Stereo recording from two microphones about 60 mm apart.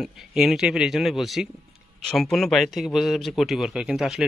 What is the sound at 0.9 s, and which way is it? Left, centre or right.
Speech, centre.